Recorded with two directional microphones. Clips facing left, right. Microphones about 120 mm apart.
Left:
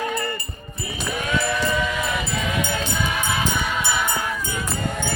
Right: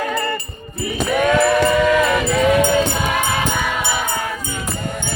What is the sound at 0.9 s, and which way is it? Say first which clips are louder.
Music: right 10 dB; 65° right (ahead or behind).